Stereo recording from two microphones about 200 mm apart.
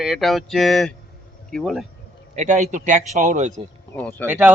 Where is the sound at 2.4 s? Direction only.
35° right (ahead or behind).